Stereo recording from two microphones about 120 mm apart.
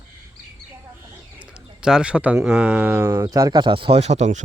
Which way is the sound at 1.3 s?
10° right (ahead or behind).